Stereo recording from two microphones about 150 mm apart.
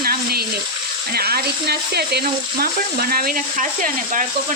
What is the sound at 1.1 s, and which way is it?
Frying, 90° right.